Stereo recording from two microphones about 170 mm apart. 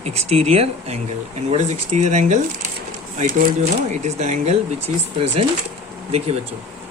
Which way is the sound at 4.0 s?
40° right (ahead or behind).